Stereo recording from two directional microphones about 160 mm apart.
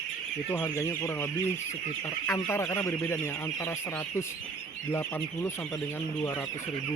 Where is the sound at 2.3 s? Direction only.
15° left (ahead or behind).